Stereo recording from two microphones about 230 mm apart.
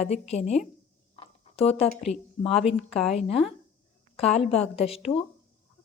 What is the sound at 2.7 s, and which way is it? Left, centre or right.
Speech, centre.